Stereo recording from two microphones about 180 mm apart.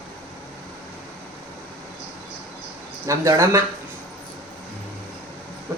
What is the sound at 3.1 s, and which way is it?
Speech, 15° right (ahead or behind).